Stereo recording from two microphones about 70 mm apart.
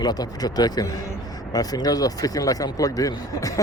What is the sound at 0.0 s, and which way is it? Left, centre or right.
Speech, left.